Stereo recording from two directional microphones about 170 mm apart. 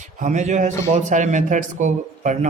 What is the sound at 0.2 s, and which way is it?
Speech, 45° right (ahead or behind).